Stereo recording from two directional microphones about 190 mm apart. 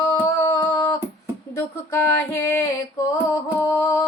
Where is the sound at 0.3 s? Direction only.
15° left (ahead or behind).